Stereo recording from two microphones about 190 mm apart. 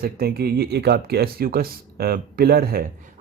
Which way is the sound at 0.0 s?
55° right (ahead or behind).